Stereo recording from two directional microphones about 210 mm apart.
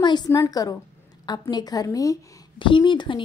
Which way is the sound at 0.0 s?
20° left (ahead or behind).